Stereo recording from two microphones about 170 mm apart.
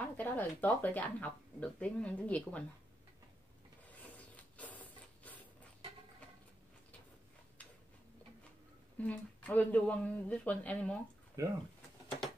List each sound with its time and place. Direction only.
0.0 s speech: 10° left (ahead or behind)
4.0 s printer: 10° left (ahead or behind)
8.9 s speech: 10° left (ahead or behind)
11.4 s speech: 20° right (ahead or behind)